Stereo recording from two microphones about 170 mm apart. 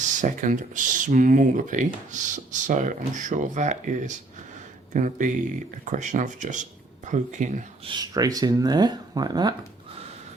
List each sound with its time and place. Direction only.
0.0 s speech: 45° right (ahead or behind)
7.9 s speech: 25° right (ahead or behind)